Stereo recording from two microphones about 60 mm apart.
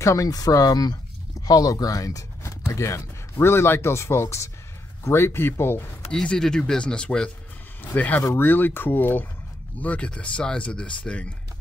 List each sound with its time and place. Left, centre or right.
0.0 s speech: left
6.2 s speech: centre
7.8 s speech: left
9.8 s speech: left